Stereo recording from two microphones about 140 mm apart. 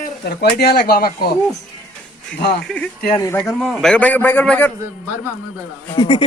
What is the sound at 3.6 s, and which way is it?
A man's voice, centre (ahead or behind).